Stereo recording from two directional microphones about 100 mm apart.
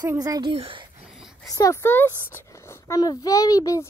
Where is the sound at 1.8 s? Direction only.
20° left (ahead or behind).